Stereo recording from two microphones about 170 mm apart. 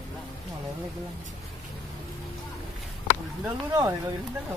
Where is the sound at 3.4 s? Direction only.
20° right (ahead or behind).